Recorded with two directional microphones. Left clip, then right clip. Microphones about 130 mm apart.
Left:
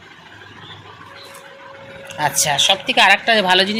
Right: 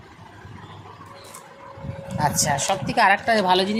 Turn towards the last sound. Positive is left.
turn(degrees=-5)  # may be behind; listen again after turning